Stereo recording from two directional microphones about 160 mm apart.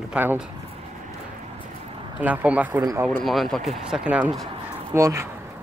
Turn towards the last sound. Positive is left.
turn(degrees=-20)  # may be behind; listen again after turning